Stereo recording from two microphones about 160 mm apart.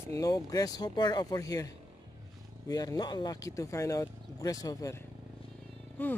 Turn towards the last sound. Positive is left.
turn(degrees=10)  # may be behind; listen again after turning